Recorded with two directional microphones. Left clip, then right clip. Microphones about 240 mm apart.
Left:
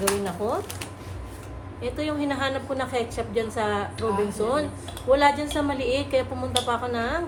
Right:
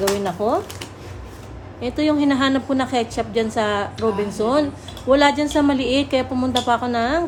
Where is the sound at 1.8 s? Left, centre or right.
Right.